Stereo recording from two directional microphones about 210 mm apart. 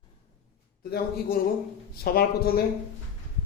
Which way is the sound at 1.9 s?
45° left (ahead or behind).